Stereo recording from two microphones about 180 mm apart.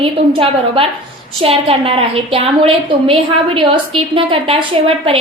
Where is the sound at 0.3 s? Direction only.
30° right (ahead or behind).